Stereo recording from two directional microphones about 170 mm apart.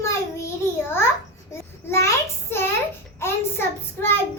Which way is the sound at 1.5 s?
15° left (ahead or behind).